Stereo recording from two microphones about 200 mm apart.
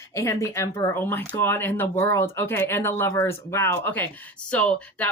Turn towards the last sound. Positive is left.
turn(degrees=5)  # may be behind; listen again after turning